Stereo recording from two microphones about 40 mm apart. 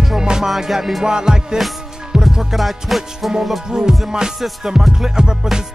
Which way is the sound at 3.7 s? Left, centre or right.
Centre.